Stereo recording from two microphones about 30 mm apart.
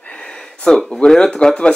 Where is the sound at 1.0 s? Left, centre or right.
Left.